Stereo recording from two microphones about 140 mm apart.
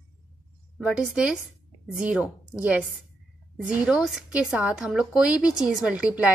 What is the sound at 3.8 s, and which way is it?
A woman's voice, 5° right (ahead or behind).